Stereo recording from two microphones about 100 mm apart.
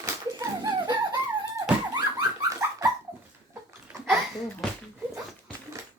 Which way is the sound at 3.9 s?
10° right (ahead or behind).